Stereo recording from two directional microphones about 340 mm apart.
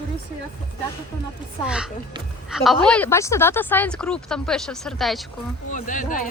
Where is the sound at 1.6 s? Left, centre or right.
Centre.